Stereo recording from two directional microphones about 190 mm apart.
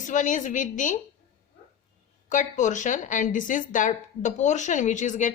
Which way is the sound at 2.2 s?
40° left (ahead or behind).